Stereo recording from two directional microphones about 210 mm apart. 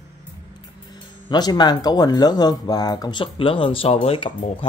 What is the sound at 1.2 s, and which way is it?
Speech, 20° left (ahead or behind).